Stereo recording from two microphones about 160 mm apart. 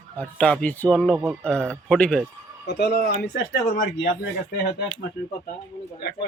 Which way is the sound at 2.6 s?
90° left.